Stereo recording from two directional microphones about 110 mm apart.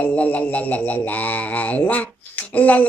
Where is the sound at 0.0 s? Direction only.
15° left (ahead or behind).